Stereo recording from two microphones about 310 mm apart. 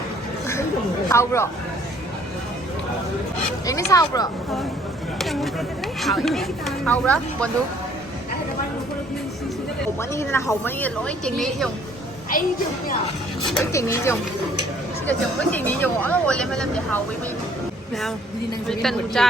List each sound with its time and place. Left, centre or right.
1.0 s a woman's voice: centre
3.7 s a woman's voice: centre
5.2 s speech: centre
10.0 s a woman's voice: centre
13.5 s a woman's voice: centre
18.7 s speech: centre